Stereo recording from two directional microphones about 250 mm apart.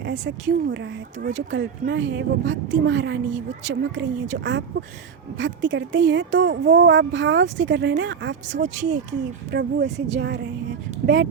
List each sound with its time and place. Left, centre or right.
0.0 s a woman's voice: right
8.6 s speech: right
9.5 s a woman's voice: right